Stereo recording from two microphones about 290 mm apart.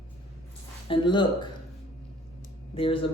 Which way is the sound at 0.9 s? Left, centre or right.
Centre.